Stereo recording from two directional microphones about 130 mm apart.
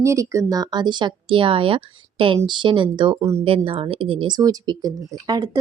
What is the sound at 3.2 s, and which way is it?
Speech, 20° right (ahead or behind).